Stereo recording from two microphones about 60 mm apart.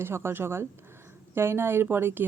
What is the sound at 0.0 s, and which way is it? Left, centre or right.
A woman's voice, right.